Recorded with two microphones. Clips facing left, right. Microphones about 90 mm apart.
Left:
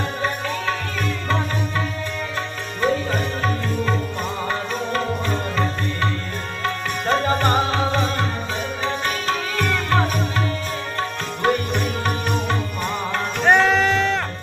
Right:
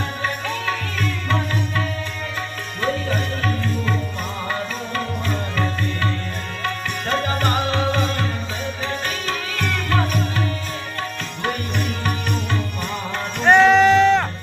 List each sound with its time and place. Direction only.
2.8 s music: 20° left (ahead or behind)
4.9 s music: 25° left (ahead or behind)
7.4 s music: 30° left (ahead or behind)
13.4 s sheep: 5° left (ahead or behind)